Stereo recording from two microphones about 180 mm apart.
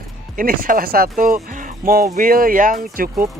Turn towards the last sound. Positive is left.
turn(degrees=-50)  # may be behind; listen again after turning